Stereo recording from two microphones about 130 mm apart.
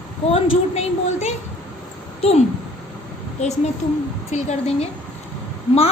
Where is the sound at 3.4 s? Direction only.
60° left (ahead or behind).